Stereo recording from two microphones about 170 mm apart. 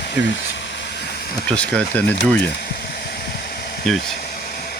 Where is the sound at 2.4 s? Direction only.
75° left (ahead or behind).